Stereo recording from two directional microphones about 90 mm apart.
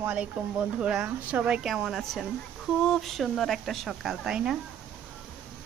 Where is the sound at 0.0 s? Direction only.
15° right (ahead or behind).